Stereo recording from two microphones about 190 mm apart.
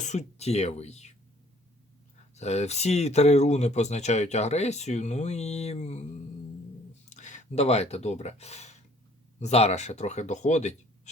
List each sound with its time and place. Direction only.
0.0 s speech: 40° left (ahead or behind)
2.3 s speech: 35° left (ahead or behind)
7.1 s speech: 40° left (ahead or behind)